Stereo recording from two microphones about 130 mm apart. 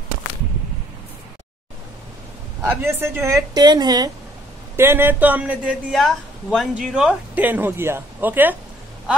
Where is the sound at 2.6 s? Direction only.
20° right (ahead or behind).